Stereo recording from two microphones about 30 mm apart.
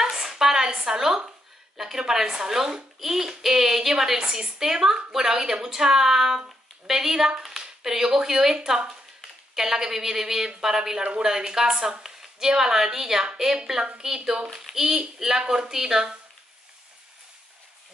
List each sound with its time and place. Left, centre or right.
0.0 s a sound: centre
0.7 s a woman's voice: right
2.2 s a woman's voice: right
11.0 s speech: right
11.2 s a woman's voice: centre
12.0 s a sound: centre
12.4 s a woman's voice: right
15.4 s a woman's voice: right